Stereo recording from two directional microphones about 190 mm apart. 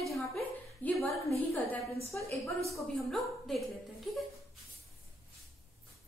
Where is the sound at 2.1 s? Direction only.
Centre (ahead or behind).